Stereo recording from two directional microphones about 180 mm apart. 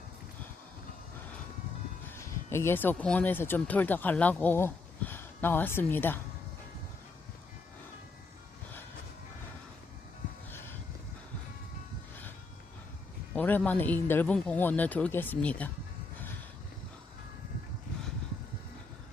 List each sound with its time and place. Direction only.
2.0 s speech: 15° left (ahead or behind)
10.5 s a sound: 10° left (ahead or behind)
13.3 s speech: 10° left (ahead or behind)